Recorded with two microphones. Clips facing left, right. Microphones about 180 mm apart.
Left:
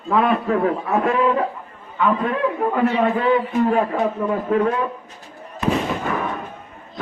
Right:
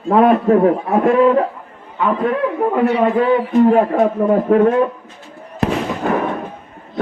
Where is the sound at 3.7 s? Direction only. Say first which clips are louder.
Right 6 dB; 40° right (ahead or behind).